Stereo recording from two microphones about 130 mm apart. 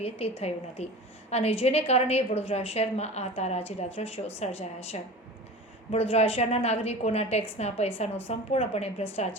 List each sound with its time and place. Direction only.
0.0 s a woman's voice: 50° left (ahead or behind)